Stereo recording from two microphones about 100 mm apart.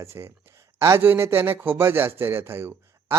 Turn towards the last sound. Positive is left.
turn(degrees=-25)  # may be behind; listen again after turning